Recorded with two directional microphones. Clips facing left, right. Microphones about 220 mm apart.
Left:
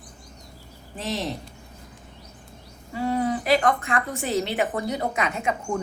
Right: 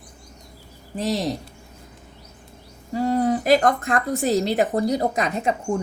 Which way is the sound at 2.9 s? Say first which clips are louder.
Right 4 dB; 40° right (ahead or behind).